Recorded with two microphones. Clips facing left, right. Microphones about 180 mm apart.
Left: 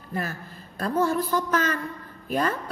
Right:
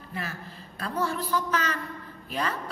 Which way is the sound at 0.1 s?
45° left (ahead or behind).